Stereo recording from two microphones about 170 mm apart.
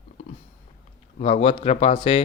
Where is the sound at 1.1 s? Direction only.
40° left (ahead or behind).